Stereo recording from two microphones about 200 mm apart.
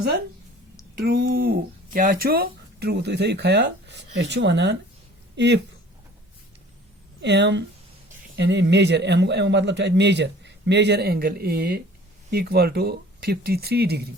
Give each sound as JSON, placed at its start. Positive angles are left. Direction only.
{"t": 0.9, "sound": "speech", "side_deg": -50}
{"t": 7.2, "sound": "speech", "side_deg": -60}